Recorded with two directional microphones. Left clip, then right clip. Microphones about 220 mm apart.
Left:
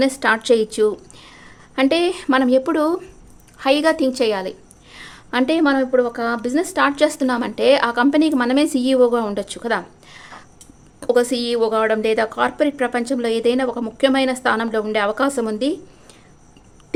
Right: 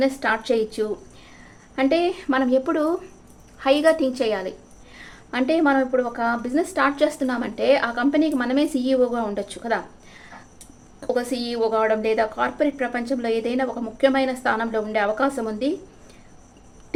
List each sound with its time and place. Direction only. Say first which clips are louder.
0.0 s a woman's voice: left 4 dB; 35° left (ahead or behind)